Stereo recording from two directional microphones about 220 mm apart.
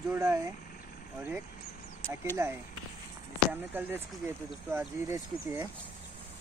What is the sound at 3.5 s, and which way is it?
Speech, 10° right (ahead or behind).